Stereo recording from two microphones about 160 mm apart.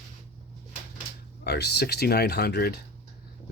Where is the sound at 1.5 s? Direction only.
90° left.